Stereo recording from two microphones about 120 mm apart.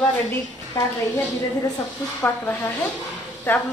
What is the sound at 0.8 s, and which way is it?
Speech, 35° left (ahead or behind).